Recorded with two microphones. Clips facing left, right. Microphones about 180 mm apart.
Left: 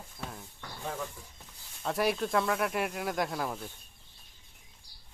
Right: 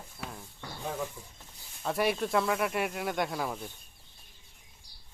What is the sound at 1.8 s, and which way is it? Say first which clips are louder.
Speech: even; centre (ahead or behind).